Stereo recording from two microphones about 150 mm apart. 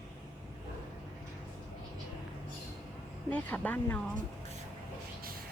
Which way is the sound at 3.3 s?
10° left (ahead or behind).